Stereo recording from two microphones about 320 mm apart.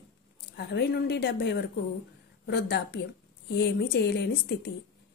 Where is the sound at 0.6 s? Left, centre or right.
Left.